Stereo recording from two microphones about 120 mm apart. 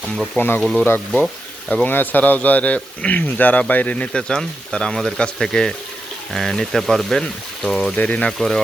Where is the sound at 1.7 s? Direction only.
15° left (ahead or behind).